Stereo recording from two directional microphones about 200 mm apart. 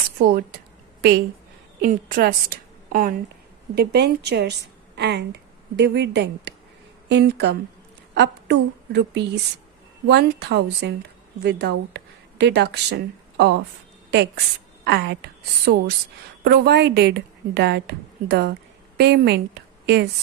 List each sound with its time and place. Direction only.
1.8 s a woman's voice: 45° right (ahead or behind)
3.8 s a woman's voice: 55° right (ahead or behind)